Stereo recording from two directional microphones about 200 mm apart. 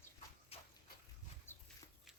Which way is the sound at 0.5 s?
30° left (ahead or behind).